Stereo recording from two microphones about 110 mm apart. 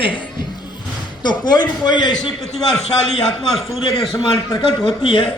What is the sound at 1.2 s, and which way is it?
Speech, 40° left (ahead or behind).